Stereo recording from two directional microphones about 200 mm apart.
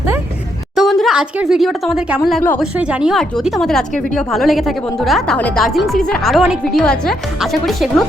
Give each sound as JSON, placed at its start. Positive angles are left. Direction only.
{"t": 0.8, "sound": "speech", "side_deg": 0}